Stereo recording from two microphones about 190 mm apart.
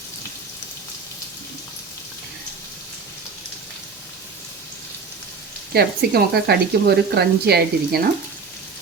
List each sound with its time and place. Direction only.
5.7 s speech: 55° right (ahead or behind)